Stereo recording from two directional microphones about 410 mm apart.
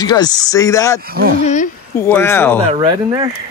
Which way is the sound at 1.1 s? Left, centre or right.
Right.